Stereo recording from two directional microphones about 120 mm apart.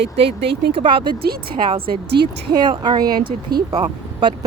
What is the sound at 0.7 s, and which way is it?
Speech, 45° right (ahead or behind).